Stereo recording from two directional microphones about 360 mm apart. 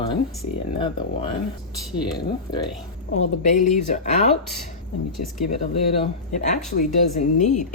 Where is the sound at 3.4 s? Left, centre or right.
Centre.